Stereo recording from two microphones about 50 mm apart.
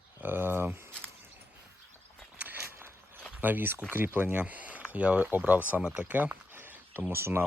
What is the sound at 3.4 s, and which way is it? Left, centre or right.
Speech, right.